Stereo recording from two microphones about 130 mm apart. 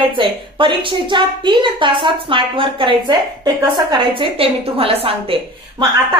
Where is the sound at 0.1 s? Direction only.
40° right (ahead or behind).